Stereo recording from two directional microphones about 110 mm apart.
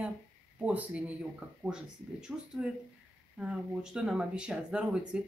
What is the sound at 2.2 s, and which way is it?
Speech, 5° right (ahead or behind).